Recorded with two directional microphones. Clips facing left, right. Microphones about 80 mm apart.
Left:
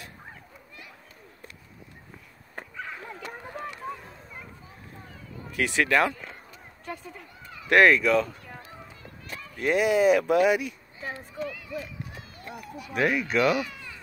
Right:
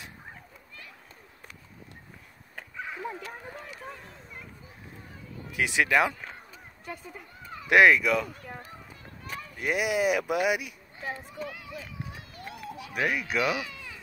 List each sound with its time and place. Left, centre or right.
2.8 s a sound: centre
3.2 s a sound: left
5.6 s speech: centre
7.6 s speech: centre
9.6 s speech: centre
12.6 s run: right
12.9 s speech: centre